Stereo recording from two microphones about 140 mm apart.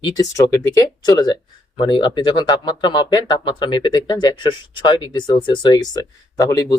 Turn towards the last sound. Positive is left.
turn(degrees=25)  # may be behind; listen again after turning